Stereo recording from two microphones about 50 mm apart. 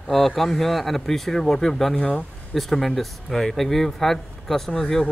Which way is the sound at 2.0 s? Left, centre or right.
Left.